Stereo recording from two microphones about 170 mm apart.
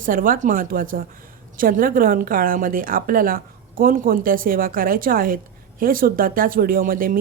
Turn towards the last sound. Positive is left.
turn(degrees=-55)  # may be behind; listen again after turning